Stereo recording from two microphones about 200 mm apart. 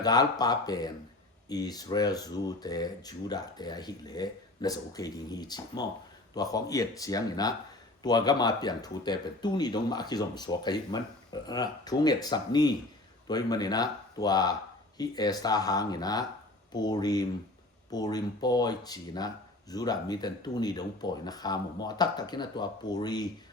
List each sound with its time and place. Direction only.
0.0 s speech: 20° left (ahead or behind)